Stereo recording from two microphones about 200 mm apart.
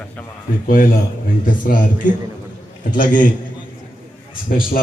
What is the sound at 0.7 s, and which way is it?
A man's voice, 45° left (ahead or behind).